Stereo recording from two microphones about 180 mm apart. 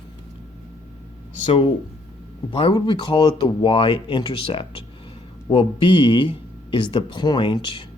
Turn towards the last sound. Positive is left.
turn(degrees=25)  # may be behind; listen again after turning